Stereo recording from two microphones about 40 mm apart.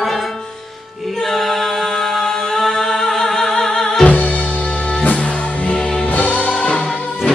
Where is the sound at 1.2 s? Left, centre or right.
Centre.